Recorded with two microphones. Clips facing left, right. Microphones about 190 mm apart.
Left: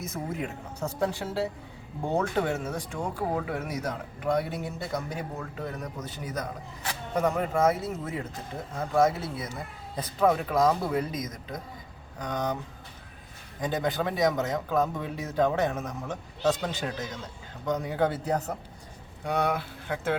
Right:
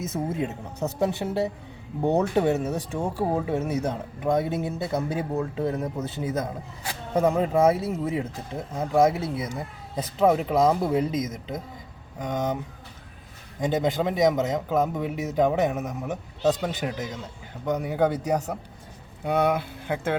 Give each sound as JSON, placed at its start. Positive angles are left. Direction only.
{"t": 0.1, "sound": "speech", "side_deg": -20}
{"t": 13.6, "sound": "speech", "side_deg": -20}